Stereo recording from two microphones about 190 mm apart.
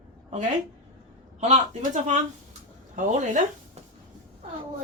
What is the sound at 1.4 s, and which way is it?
Speech, 40° right (ahead or behind).